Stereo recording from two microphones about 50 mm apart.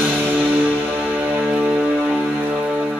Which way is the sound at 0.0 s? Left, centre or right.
Right.